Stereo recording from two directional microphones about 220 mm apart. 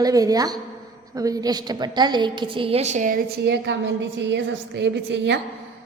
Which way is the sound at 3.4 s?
50° right (ahead or behind).